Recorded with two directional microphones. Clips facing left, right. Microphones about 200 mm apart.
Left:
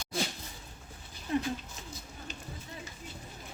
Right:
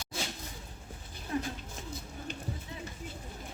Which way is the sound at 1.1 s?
55° right (ahead or behind).